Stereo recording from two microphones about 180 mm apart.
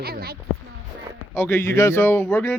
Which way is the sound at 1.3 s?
10° left (ahead or behind).